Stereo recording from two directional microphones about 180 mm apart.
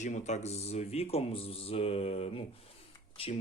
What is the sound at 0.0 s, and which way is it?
Speech, 40° left (ahead or behind).